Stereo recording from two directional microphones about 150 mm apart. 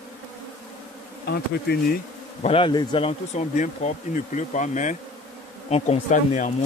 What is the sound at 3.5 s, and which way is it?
Speech, 55° left (ahead or behind).